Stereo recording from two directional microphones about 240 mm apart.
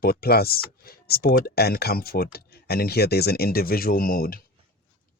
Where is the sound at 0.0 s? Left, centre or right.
Left.